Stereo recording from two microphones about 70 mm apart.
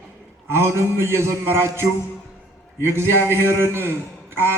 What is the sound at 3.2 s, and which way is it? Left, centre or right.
Speech, right.